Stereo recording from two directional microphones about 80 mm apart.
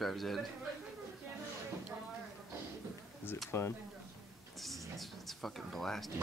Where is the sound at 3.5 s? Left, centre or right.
Left.